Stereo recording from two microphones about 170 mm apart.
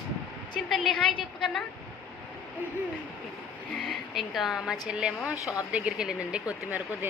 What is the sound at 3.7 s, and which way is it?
Speech, centre (ahead or behind).